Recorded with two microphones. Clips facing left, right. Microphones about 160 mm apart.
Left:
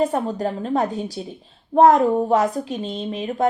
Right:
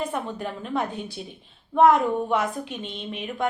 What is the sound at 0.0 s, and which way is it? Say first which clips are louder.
A woman's voice: left 8 dB; 40° left (ahead or behind).